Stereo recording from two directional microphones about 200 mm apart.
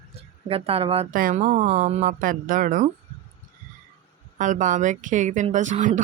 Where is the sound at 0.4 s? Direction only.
30° right (ahead or behind).